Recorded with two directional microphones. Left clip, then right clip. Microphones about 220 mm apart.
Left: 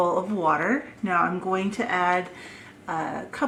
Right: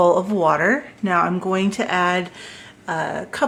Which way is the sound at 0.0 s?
40° right (ahead or behind).